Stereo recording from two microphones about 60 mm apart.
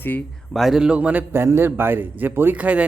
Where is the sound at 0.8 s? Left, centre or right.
Right.